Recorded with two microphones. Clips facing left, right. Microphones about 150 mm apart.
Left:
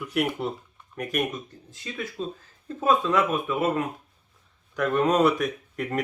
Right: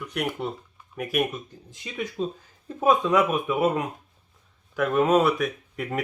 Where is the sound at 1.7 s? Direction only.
15° right (ahead or behind).